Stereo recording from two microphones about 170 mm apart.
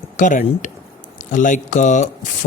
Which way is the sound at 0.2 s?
50° left (ahead or behind).